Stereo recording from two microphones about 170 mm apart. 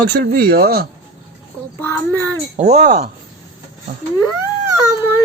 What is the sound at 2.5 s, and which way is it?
Speech, 45° right (ahead or behind).